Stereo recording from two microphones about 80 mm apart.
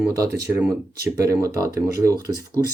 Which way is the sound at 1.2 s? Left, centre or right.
Right.